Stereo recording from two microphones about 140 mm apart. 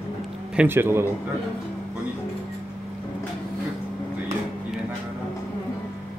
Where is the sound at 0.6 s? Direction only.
15° right (ahead or behind).